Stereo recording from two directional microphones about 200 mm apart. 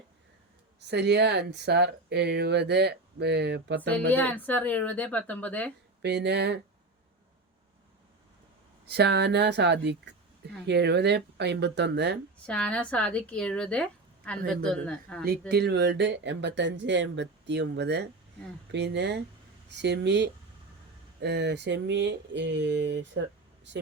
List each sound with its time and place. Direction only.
0.9 s speech: 55° right (ahead or behind)
3.9 s speech: 5° left (ahead or behind)
6.0 s speech: 55° right (ahead or behind)
8.9 s speech: 55° right (ahead or behind)
12.5 s a woman's voice: 5° left (ahead or behind)
15.2 s speech: 50° right (ahead or behind)